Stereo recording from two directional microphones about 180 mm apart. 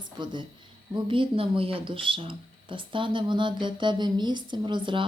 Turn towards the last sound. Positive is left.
turn(degrees=-30)  # may be behind; listen again after turning